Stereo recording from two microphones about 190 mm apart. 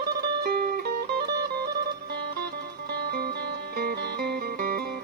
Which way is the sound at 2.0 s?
60° right (ahead or behind).